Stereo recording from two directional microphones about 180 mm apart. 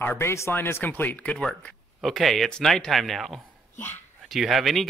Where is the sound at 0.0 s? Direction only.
15° left (ahead or behind).